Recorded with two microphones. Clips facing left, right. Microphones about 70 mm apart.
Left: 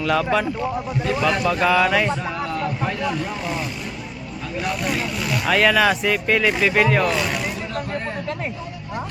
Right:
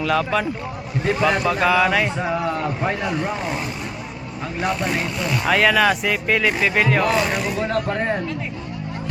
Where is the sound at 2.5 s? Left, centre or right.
Right.